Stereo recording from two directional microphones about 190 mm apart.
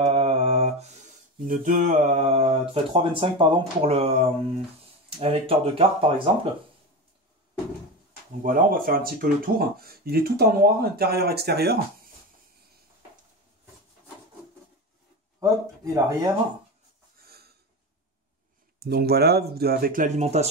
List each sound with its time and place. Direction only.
0.0 s mantra: 30° right (ahead or behind)
1.4 s speech: 45° right (ahead or behind); by 6.2 s 30° right (ahead or behind)
8.4 s speech: 45° right (ahead or behind)
15.4 s speech: 15° right (ahead or behind)
18.8 s speech: 55° right (ahead or behind); by 20.4 s 35° right (ahead or behind)